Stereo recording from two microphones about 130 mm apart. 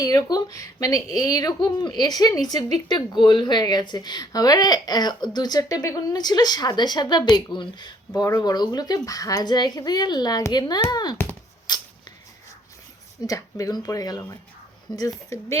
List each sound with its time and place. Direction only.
0.0 s a woman's voice: 30° left (ahead or behind)
11.7 s a sound: 35° left (ahead or behind)
13.2 s speech: 25° left (ahead or behind)